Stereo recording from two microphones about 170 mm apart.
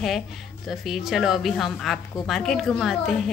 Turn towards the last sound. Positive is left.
turn(degrees=0)  # may be behind; listen again after turning